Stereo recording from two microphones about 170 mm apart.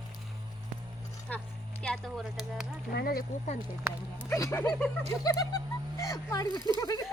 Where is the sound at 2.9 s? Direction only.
60° left (ahead or behind).